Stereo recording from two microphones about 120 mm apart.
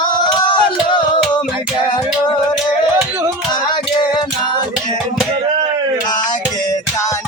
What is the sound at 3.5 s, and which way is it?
Music, 40° left (ahead or behind).